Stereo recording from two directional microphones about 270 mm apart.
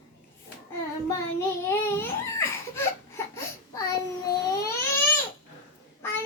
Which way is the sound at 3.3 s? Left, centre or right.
Centre.